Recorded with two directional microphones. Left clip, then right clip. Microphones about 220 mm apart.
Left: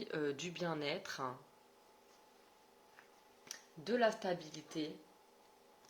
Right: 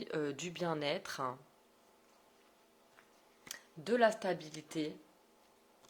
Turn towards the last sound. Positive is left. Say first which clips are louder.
# right 3 dB
turn(degrees=-40)  # may be behind; listen again after turning